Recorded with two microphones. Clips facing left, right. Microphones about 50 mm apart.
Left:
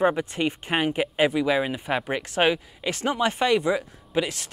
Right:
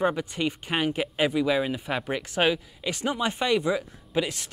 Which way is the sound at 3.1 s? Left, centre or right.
Left.